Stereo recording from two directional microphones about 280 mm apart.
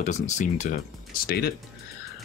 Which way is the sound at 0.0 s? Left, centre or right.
Left.